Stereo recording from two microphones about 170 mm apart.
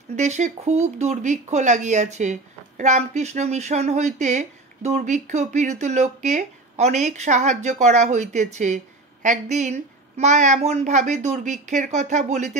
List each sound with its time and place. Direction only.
0.1 s speech: 45° right (ahead or behind)